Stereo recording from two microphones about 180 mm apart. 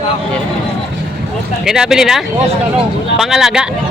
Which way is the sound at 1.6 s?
5° right (ahead or behind).